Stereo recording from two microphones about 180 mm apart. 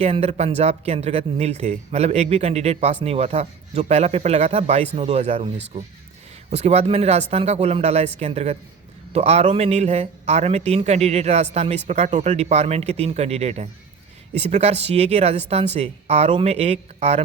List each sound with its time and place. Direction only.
0.0 s speech: 35° right (ahead or behind)
6.5 s speech: 35° right (ahead or behind)